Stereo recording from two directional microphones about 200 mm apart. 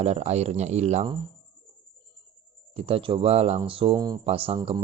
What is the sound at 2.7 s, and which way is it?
Speech, 30° right (ahead or behind).